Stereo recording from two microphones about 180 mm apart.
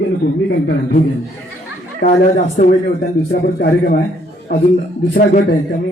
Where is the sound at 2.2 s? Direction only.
50° left (ahead or behind).